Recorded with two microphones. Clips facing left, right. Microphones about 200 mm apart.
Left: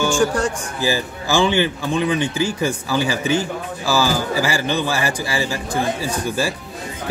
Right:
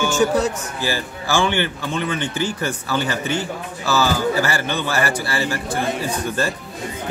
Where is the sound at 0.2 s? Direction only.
5° right (ahead or behind).